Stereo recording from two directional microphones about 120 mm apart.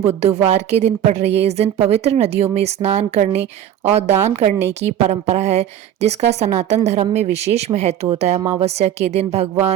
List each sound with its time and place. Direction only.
0.1 s a woman's voice: 60° right (ahead or behind)